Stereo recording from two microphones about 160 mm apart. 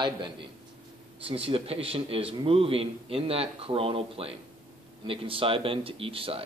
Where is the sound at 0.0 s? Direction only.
30° right (ahead or behind).